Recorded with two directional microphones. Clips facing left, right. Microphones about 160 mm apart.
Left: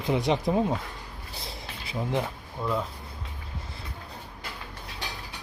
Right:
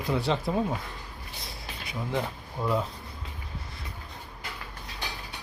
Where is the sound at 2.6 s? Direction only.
10° right (ahead or behind).